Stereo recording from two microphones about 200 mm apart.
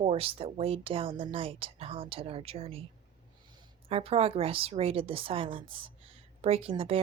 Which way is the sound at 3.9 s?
30° right (ahead or behind).